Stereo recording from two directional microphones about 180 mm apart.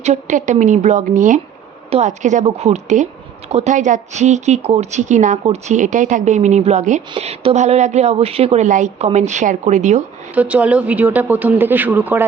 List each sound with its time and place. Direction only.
0.0 s a woman's voice: 40° right (ahead or behind)
10.3 s speech: 10° right (ahead or behind)